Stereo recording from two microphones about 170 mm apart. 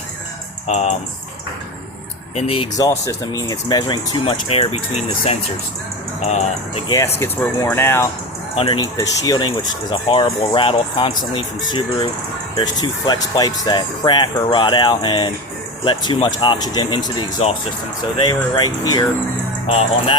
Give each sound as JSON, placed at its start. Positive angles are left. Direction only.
{"t": 0.7, "sound": "speech", "side_deg": 40}
{"t": 2.3, "sound": "speech", "side_deg": 35}
{"t": 2.7, "sound": "speech", "side_deg": 20}
{"t": 6.8, "sound": "speech", "side_deg": 20}
{"t": 8.5, "sound": "speech", "side_deg": 35}
{"t": 8.8, "sound": "speech", "side_deg": 20}
{"t": 9.9, "sound": "speech", "side_deg": 30}